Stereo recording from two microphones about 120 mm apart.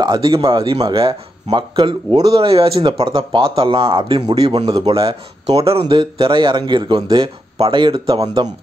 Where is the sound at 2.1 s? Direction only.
55° right (ahead or behind).